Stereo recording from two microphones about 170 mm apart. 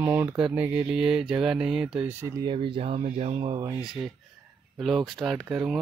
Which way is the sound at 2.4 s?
30° right (ahead or behind).